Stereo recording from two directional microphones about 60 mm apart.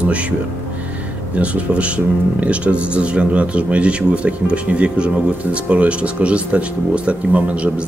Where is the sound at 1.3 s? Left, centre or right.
Right.